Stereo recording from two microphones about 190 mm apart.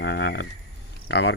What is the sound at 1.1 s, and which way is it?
Speech, 65° left (ahead or behind).